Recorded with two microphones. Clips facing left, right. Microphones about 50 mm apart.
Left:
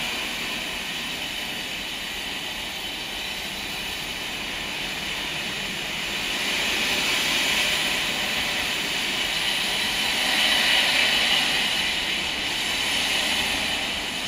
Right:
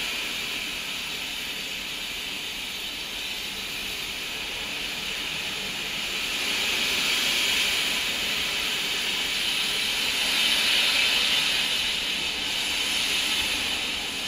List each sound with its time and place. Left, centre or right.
6.4 s vehicle: left